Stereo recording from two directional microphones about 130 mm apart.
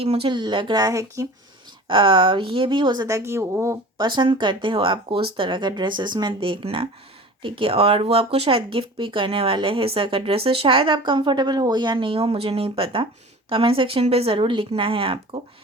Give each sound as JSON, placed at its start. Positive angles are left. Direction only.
{"t": 0.0, "sound": "speech", "side_deg": -45}
{"t": 1.9, "sound": "speech", "side_deg": -40}
{"t": 3.2, "sound": "speech", "side_deg": -20}
{"t": 3.9, "sound": "speech", "side_deg": -35}